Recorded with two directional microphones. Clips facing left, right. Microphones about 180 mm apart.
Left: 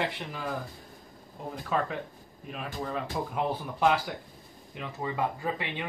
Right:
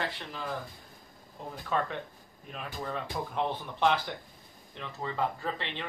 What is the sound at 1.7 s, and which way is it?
Speech, 5° left (ahead or behind).